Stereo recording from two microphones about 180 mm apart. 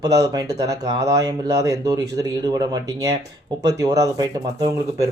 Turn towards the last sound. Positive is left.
turn(degrees=-20)  # may be behind; listen again after turning